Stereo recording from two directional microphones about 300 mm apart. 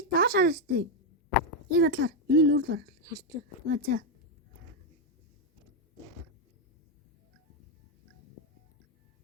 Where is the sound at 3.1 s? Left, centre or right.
Centre.